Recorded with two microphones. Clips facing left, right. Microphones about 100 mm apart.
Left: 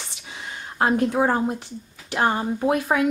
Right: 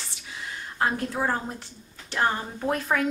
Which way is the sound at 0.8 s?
20° left (ahead or behind).